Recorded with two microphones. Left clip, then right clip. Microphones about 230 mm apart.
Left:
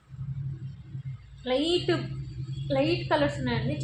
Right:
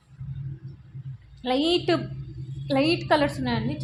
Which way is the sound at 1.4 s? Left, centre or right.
Right.